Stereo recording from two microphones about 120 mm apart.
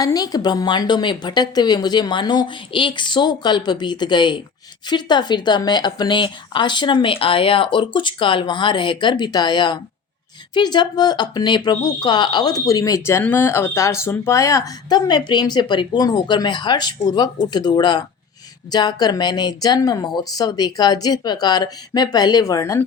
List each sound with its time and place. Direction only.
0.0 s speech: 30° left (ahead or behind)